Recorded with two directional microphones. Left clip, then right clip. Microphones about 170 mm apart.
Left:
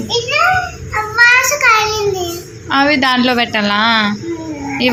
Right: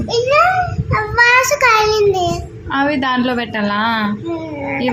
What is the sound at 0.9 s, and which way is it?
Child singing, 90° right.